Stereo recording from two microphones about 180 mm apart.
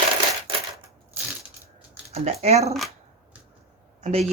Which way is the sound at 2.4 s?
35° right (ahead or behind).